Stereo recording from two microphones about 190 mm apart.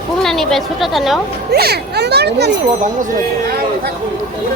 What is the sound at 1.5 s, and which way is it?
A child's voice, 55° right (ahead or behind).